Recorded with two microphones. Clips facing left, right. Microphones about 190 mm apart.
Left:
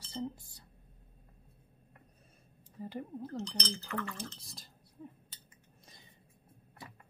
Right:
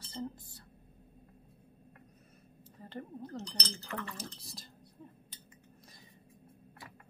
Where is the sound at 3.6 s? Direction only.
35° right (ahead or behind).